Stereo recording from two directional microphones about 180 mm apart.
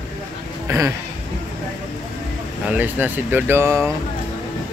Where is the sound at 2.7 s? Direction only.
10° right (ahead or behind).